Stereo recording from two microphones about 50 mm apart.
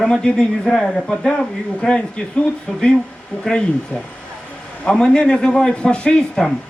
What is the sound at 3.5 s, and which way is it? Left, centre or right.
Speech, left.